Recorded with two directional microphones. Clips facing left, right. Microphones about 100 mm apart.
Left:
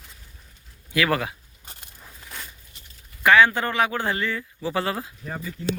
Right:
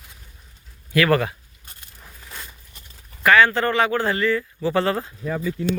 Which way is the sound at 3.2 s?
15° left (ahead or behind).